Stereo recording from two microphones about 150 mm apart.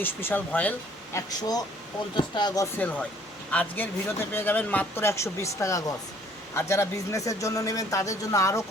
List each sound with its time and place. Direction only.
0.0 s speech: 15° left (ahead or behind)
1.1 s a man's voice: 25° left (ahead or behind)
2.7 s a man's voice: 10° left (ahead or behind)